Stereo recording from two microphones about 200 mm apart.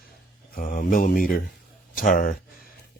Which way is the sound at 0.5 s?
45° left (ahead or behind).